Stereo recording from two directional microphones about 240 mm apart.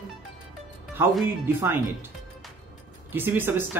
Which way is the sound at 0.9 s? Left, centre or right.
Centre.